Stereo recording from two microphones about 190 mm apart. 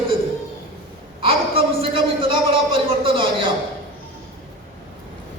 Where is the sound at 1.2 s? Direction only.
30° right (ahead or behind).